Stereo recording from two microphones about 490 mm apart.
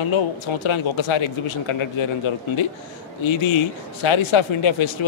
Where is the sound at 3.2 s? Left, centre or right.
Left.